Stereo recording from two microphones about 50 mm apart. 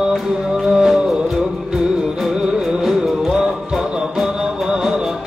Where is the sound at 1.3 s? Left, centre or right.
Centre.